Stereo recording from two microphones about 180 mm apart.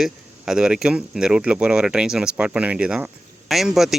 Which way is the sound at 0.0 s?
5° right (ahead or behind).